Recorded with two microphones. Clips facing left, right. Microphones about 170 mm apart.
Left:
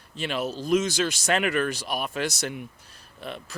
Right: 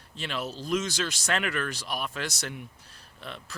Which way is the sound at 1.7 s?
50° left (ahead or behind).